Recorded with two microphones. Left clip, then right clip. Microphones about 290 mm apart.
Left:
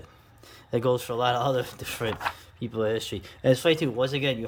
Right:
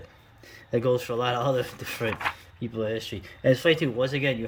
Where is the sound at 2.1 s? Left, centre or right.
Left.